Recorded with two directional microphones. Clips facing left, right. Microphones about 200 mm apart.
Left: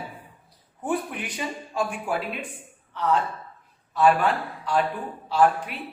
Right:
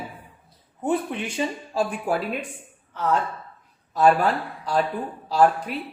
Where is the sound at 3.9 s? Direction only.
40° right (ahead or behind).